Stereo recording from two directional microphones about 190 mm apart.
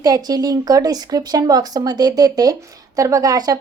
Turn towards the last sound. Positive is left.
turn(degrees=-20)  # may be behind; listen again after turning